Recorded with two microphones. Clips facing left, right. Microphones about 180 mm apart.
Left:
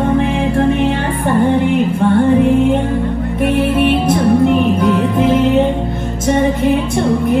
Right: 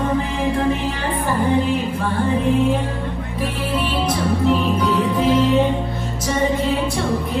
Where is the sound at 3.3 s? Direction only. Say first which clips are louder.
Left 10 dB; 60° left (ahead or behind).